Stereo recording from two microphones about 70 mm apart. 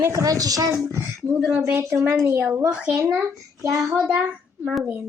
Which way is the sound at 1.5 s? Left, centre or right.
Right.